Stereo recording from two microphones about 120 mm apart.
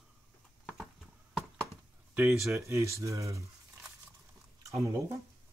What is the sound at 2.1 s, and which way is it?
Speech, 5° right (ahead or behind).